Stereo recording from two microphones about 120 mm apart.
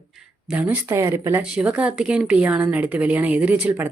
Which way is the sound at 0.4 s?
10° right (ahead or behind).